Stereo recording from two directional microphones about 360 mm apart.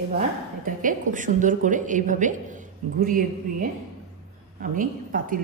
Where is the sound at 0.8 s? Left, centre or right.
Right.